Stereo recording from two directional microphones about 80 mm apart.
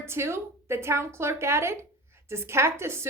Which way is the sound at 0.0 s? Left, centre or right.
Right.